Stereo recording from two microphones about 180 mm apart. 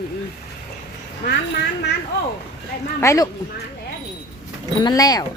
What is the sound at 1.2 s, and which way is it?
Speech, 70° left (ahead or behind).